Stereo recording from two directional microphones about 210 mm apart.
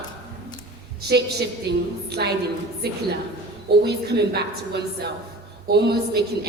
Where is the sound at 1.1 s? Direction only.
50° right (ahead or behind).